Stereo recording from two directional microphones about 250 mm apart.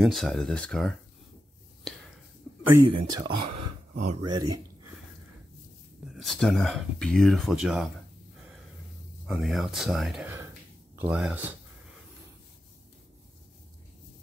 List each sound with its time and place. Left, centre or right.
0.0 s speech: centre
2.6 s speech: centre
3.4 s a sound: right
6.1 s speech: centre
9.2 s speech: centre